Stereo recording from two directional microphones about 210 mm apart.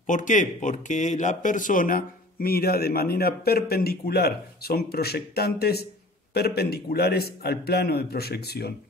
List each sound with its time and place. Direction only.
0.0 s a man's voice: 35° left (ahead or behind)